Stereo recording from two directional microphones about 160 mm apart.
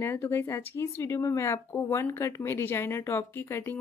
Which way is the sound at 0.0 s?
15° left (ahead or behind).